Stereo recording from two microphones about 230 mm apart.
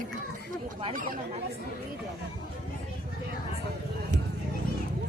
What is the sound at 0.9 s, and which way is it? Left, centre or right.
Speech, right.